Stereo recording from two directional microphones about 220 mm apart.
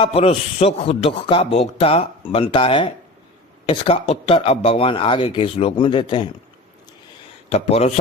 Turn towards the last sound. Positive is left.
turn(degrees=30)  # may be behind; listen again after turning